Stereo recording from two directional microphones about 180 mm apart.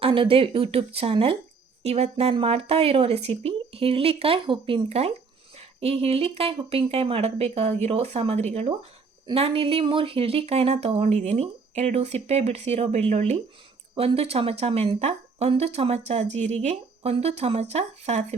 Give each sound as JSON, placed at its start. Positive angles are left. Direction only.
{"t": 0.0, "sound": "speech", "side_deg": -30}